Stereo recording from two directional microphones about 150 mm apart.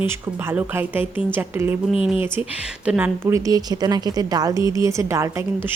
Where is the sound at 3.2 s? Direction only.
20° right (ahead or behind).